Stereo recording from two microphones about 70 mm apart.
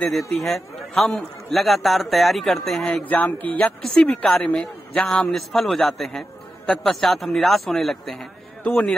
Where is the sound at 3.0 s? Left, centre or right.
Left.